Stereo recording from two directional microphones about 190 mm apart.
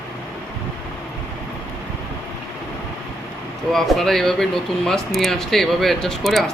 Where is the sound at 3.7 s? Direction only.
Centre (ahead or behind).